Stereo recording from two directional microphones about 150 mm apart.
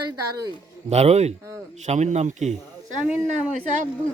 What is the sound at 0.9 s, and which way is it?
A man's voice, 45° right (ahead or behind).